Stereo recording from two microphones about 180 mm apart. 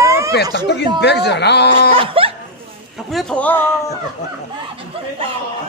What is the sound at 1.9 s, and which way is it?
Laughter, 30° right (ahead or behind).